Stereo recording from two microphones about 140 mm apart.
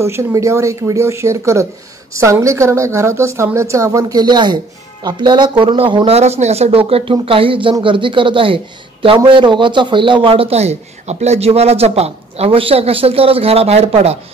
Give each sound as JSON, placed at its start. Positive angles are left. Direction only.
{"t": 0.0, "sound": "a woman's voice", "side_deg": -20}